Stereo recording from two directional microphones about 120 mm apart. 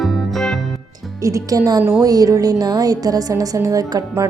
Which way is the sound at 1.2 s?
30° right (ahead or behind).